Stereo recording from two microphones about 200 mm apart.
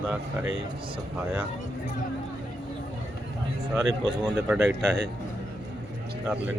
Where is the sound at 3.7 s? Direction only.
20° right (ahead or behind).